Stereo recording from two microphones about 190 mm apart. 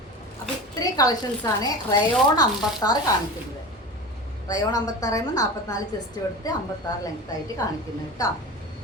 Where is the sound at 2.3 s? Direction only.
20° left (ahead or behind).